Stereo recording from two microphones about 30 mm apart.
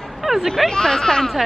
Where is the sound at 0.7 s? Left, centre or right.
Centre.